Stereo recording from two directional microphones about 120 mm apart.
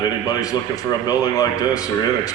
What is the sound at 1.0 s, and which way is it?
Speech, 30° left (ahead or behind).